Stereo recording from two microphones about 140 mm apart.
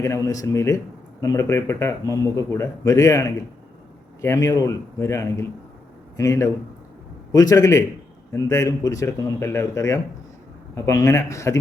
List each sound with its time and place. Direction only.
0.0 s speech: 25° left (ahead or behind)